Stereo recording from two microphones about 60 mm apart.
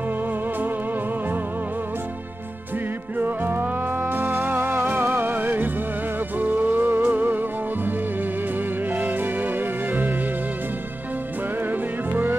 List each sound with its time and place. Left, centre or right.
3.2 s music: right
8.9 s music: right
12.1 s music: right